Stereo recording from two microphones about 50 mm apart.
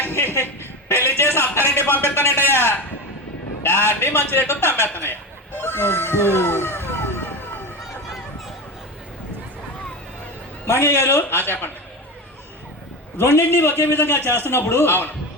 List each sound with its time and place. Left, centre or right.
0.0 s a sound: left
2.0 s a sound: left
3.6 s a man's voice: left
5.5 s vehicle: left
10.7 s a man's voice: left
13.1 s a man's voice: left
13.5 s a man's voice: left